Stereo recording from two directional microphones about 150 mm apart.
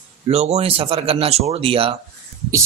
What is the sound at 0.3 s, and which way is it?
Speech, 45° right (ahead or behind).